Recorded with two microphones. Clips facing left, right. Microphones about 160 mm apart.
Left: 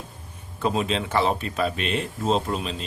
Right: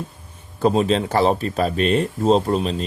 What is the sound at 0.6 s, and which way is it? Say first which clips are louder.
Speech: right 7 dB; 35° right (ahead or behind).